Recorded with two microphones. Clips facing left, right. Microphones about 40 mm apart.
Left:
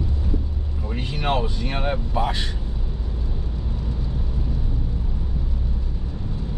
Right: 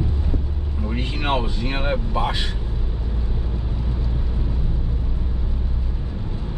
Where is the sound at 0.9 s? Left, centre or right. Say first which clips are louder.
Right 1 dB; right.